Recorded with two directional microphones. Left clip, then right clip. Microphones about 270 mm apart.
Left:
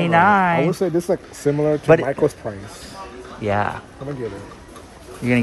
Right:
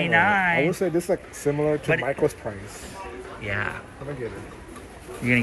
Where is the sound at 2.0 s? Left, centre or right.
Left.